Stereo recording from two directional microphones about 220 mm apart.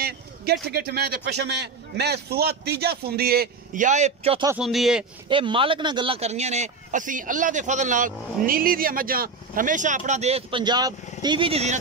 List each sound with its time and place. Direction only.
0.0 s a man's voice: 45° right (ahead or behind); by 4.5 s 25° right (ahead or behind)
4.5 s speech: centre (ahead or behind)
5.3 s speech: 25° right (ahead or behind)